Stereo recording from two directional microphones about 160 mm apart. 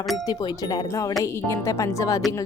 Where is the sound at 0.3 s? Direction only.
25° left (ahead or behind).